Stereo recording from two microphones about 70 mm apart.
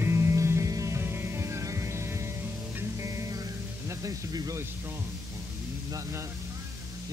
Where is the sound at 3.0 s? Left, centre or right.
Right.